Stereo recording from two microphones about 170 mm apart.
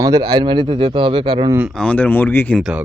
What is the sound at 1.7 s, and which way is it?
Speech, 5° left (ahead or behind).